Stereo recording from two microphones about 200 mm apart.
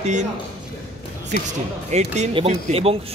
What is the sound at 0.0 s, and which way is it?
Speech, 35° right (ahead or behind).